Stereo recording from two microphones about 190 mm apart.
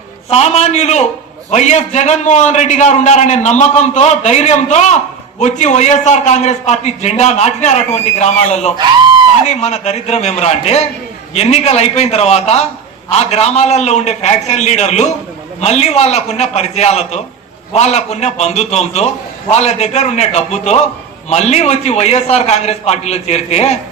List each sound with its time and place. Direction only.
0.3 s a man's voice: 35° left (ahead or behind)